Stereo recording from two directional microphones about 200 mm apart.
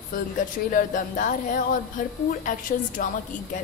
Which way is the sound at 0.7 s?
40° left (ahead or behind).